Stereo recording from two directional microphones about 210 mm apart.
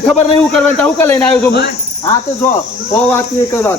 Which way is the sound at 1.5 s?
50° left (ahead or behind).